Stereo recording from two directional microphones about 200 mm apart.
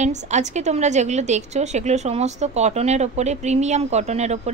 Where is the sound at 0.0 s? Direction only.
35° right (ahead or behind).